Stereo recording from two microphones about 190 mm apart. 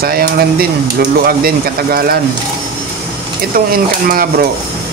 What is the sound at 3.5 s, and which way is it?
Speech, 50° right (ahead or behind).